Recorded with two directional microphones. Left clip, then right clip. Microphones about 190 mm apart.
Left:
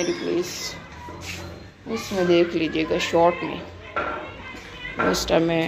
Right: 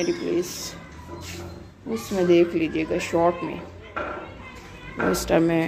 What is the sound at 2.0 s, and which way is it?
Speech, 20° right (ahead or behind).